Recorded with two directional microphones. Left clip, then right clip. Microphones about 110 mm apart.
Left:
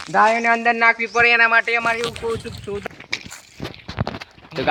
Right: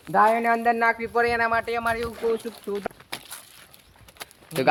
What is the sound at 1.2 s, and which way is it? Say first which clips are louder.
Speech: left 9 dB; 40° left (ahead or behind).